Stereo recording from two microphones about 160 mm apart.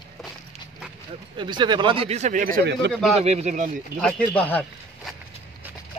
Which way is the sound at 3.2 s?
40° right (ahead or behind).